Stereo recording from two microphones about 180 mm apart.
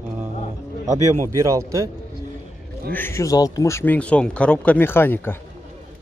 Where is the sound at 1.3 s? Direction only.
15° right (ahead or behind).